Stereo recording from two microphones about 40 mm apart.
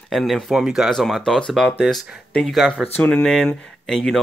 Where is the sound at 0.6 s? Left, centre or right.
Centre.